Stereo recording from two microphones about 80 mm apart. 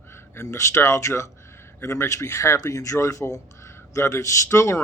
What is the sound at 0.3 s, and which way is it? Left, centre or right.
Speech, left.